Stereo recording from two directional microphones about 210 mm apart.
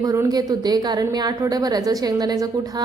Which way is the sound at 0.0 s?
15° right (ahead or behind).